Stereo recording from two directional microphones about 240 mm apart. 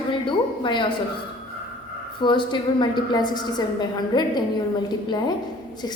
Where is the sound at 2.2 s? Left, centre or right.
Centre.